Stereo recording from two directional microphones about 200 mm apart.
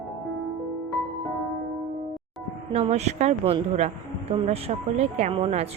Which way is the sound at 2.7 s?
30° right (ahead or behind).